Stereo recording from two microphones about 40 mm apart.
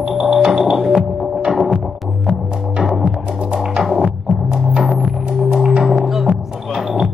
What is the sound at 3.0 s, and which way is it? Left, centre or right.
Music, right.